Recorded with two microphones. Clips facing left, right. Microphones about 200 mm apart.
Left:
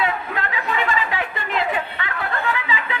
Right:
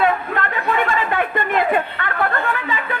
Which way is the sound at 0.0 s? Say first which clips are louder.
Right 5 dB; 55° right (ahead or behind).